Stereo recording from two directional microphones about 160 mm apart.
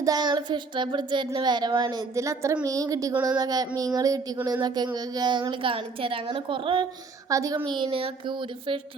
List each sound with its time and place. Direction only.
0.0 s a woman's voice: 25° right (ahead or behind)
7.3 s speech: 20° right (ahead or behind)
7.7 s a woman's voice: 35° right (ahead or behind)